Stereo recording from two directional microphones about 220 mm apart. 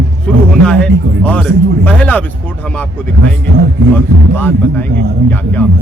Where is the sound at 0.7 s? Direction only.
5° left (ahead or behind).